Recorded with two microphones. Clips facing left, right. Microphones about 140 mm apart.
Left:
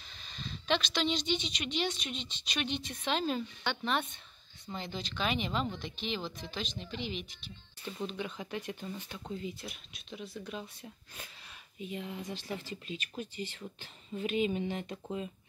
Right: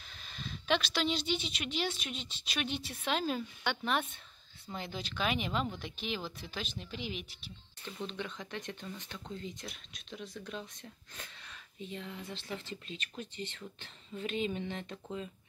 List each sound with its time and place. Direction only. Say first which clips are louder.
0.1 s a woman's voice: even; 5° right (ahead or behind)
7.8 s a woman's voice: left 2 dB; 10° left (ahead or behind)